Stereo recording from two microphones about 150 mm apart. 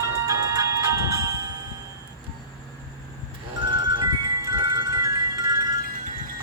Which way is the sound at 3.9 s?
30° right (ahead or behind).